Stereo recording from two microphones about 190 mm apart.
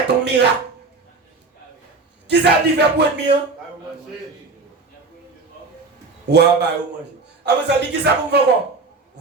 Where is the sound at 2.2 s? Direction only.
60° right (ahead or behind).